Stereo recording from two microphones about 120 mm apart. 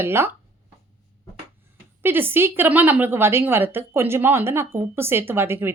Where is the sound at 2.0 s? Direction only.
20° right (ahead or behind).